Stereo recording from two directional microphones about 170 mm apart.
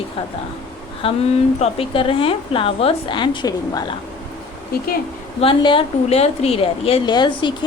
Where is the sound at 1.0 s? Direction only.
30° left (ahead or behind).